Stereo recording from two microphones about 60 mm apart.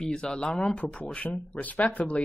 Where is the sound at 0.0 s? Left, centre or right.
Centre.